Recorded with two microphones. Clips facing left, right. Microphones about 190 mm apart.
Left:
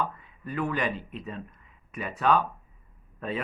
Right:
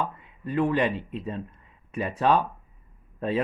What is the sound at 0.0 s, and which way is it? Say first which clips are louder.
Speech: right 1 dB; 25° right (ahead or behind).